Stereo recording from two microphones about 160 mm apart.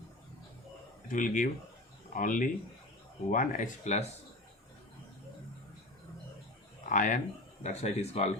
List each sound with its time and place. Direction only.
1.0 s speech: 55° left (ahead or behind)
6.8 s speech: 55° left (ahead or behind)